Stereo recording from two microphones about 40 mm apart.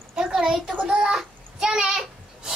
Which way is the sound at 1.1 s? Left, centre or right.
Centre.